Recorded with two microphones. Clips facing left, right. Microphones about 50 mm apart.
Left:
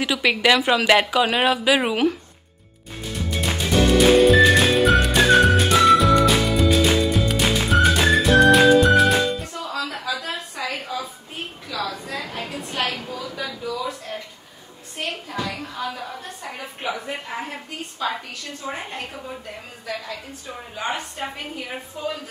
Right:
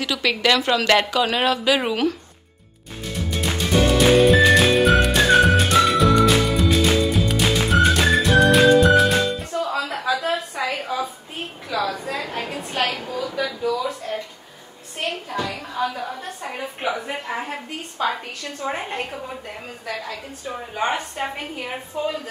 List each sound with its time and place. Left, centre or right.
0.0 s a woman's voice: centre
3.3 s music: centre
9.5 s a sound: right
13.5 s a sound: centre
15.0 s a child's voice: centre
18.6 s a woman's voice: right
20.7 s a woman's voice: right